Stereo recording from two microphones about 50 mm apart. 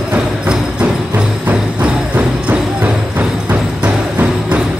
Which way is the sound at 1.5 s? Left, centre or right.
Right.